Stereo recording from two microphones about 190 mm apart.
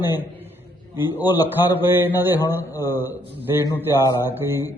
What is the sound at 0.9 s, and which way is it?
Speech, 10° right (ahead or behind).